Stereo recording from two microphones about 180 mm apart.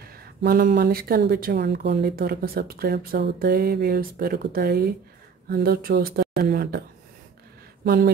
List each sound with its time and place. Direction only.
0.0 s speech: 55° right (ahead or behind)
7.8 s speech: 60° right (ahead or behind)